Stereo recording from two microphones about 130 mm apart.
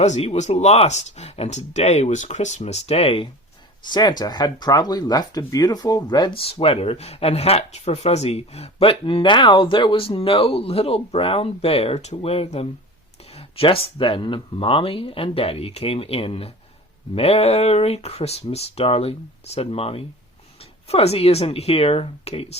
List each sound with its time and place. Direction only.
0.0 s speech: 55° left (ahead or behind)
3.8 s speech: 35° left (ahead or behind); by 22.5 s 55° left (ahead or behind)